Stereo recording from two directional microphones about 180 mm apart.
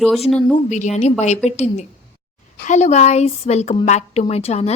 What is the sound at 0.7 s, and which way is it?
A woman's voice, 40° left (ahead or behind).